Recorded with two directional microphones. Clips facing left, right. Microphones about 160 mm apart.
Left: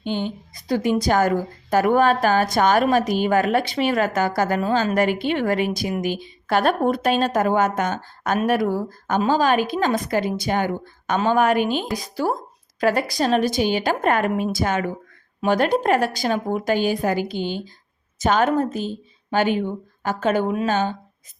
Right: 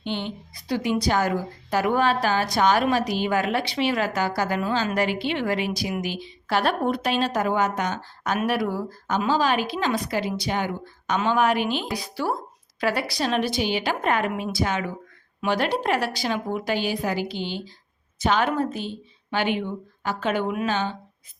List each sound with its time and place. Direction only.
0.0 s a woman's voice: 45° left (ahead or behind)